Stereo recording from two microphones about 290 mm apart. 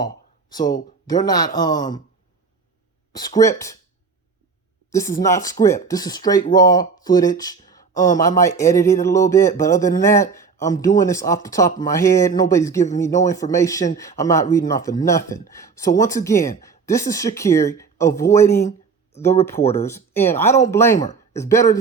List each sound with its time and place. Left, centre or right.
0.5 s a man's voice: centre
3.1 s a man's voice: centre
4.9 s a man's voice: centre
20.9 s speech: left
21.3 s a man's voice: centre